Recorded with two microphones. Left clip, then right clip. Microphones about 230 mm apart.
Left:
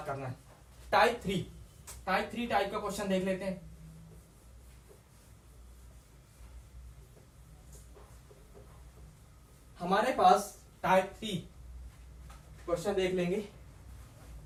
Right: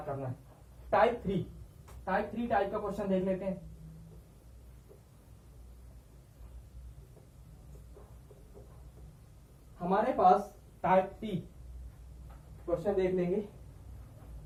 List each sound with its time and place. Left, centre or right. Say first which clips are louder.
0.0 s a man's voice: even; left
9.7 s speech: even; left
12.6 s speech: right 1 dB; left